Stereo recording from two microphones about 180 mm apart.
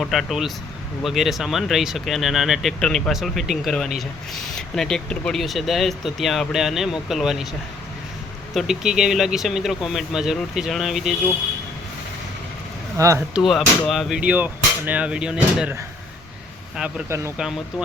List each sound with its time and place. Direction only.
0.0 s speech: centre (ahead or behind)
8.5 s speech: centre (ahead or behind)
13.0 s speech: 15° right (ahead or behind)
13.3 s speech: centre (ahead or behind)
17.1 s speech: 15° right (ahead or behind)